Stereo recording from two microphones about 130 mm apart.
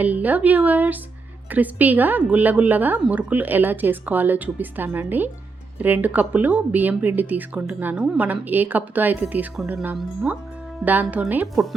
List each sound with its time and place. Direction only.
0.0 s speech: 10° right (ahead or behind)